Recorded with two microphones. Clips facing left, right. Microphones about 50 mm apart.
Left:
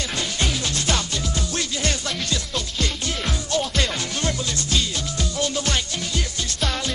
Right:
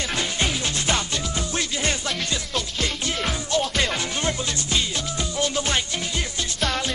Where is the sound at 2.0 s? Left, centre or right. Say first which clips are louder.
Even; centre.